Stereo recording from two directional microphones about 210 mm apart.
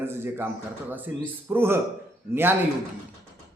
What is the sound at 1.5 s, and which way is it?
Speech, 10° right (ahead or behind).